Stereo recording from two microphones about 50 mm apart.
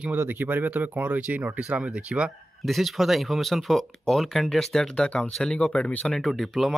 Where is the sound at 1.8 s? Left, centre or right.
Right.